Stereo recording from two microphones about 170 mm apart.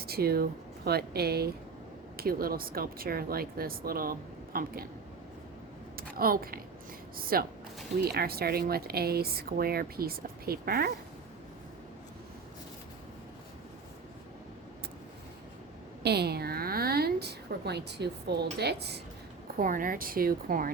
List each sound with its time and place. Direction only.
0.0 s speech: 65° right (ahead or behind)
6.0 s a woman's voice: 60° right (ahead or behind)
16.0 s a sound: 70° right (ahead or behind)
18.6 s speech: 75° right (ahead or behind)
19.5 s speech: 55° right (ahead or behind)